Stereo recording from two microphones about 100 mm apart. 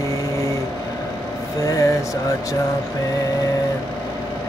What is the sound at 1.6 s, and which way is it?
Music, 30° left (ahead or behind).